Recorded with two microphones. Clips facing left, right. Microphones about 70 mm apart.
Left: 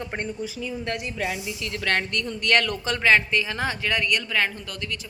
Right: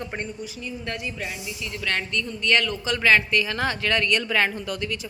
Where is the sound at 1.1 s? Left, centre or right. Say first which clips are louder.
Left 3 dB; left.